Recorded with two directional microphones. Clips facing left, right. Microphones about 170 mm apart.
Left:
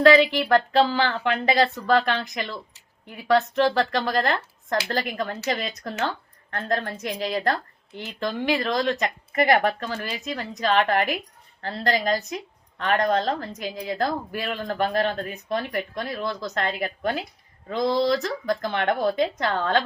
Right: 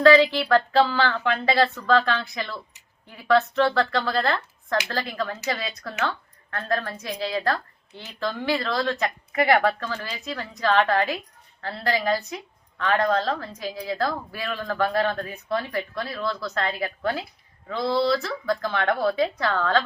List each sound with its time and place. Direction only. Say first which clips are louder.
0.5 s speech: even; 15° left (ahead or behind)